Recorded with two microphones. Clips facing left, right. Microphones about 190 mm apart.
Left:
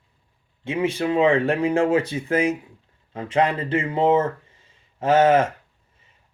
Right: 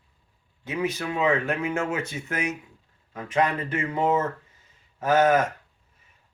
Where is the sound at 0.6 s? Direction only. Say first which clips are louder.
Left 5 dB; 25° left (ahead or behind).